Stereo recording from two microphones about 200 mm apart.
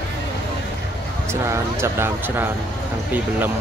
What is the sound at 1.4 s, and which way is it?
Speech, 15° right (ahead or behind).